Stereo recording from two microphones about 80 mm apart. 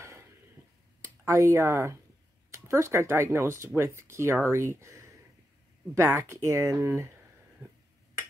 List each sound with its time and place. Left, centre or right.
1.0 s speech: right
7.6 s finger snapping: right